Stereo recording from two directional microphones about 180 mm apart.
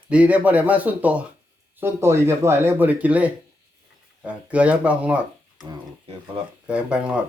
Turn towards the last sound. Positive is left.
turn(degrees=-5)  # may be behind; listen again after turning